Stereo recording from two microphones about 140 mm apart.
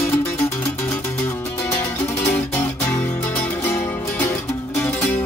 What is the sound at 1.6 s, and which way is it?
Music, 20° left (ahead or behind).